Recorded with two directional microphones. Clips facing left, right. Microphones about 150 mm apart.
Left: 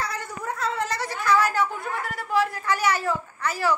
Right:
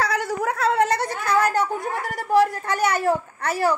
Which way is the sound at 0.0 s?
90° right.